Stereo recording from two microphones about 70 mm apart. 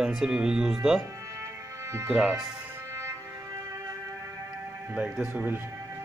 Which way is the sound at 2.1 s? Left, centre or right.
Centre.